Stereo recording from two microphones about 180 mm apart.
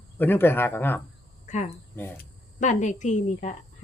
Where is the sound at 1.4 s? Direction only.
40° left (ahead or behind).